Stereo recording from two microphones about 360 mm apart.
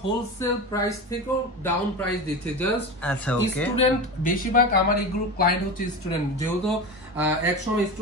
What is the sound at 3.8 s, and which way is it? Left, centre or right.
Speech, left.